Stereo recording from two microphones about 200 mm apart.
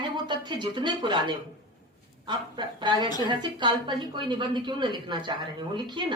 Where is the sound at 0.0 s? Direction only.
20° right (ahead or behind).